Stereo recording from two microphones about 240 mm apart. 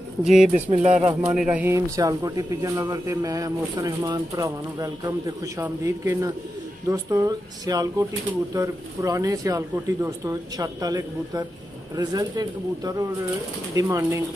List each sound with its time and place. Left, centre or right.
0.2 s speech: centre
0.7 s speech: right
1.2 s speech: centre